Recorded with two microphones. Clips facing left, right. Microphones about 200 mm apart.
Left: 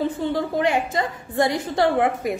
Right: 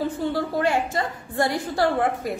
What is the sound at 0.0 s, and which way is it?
A woman's voice, 20° left (ahead or behind).